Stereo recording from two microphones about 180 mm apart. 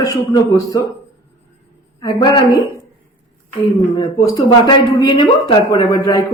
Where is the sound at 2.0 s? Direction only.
25° left (ahead or behind).